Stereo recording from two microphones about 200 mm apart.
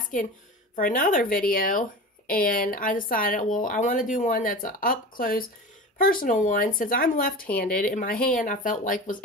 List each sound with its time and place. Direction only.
0.7 s speech: 45° left (ahead or behind)